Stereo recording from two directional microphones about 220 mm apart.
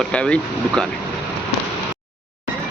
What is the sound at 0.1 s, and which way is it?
Speech, 5° left (ahead or behind).